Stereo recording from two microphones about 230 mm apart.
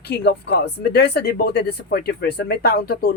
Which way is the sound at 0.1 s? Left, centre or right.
Left.